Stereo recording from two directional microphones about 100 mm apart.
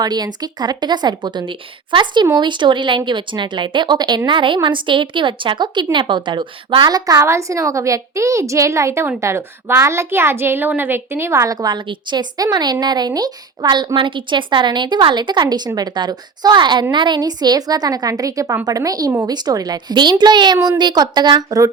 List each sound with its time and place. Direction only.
0.0 s a woman's voice: 45° right (ahead or behind)
11.5 s a woman's voice: 45° right (ahead or behind)